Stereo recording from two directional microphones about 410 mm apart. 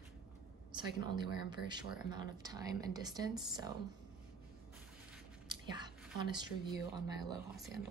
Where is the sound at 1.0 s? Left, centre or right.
Centre.